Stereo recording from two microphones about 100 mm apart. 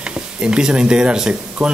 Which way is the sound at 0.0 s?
10° right (ahead or behind).